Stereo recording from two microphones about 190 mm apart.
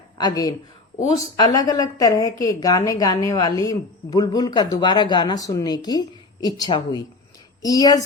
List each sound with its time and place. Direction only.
0.2 s a woman's voice: 20° left (ahead or behind)